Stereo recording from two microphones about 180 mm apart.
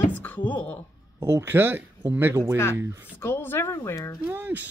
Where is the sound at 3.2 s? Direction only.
10° left (ahead or behind).